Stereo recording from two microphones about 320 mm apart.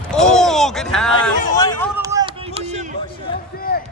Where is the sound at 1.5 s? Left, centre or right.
Centre.